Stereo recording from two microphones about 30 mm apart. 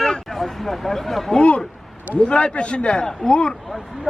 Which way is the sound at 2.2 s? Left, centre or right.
Left.